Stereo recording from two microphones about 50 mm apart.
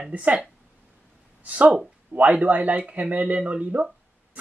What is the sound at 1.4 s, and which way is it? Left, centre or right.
Speech, right.